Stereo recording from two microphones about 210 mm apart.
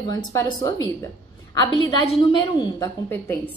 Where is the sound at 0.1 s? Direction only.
15° left (ahead or behind).